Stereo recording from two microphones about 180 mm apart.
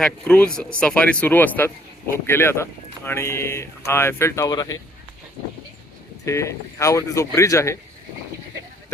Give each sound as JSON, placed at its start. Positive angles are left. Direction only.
{"t": 0.0, "sound": "speech", "side_deg": 5}
{"t": 6.2, "sound": "speech", "side_deg": 15}